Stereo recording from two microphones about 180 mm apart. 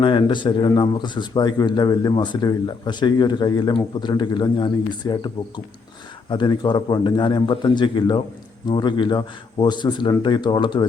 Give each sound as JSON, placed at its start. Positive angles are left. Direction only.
{"t": 0.0, "sound": "a man's voice", "side_deg": 25}